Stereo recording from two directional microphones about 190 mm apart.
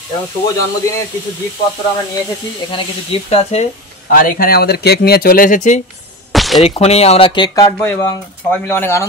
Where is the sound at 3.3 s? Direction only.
35° left (ahead or behind).